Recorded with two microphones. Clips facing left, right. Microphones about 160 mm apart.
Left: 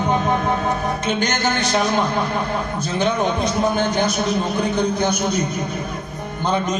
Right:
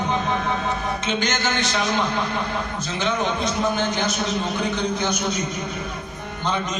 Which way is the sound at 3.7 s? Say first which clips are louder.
Left 4 dB; 50° left (ahead or behind).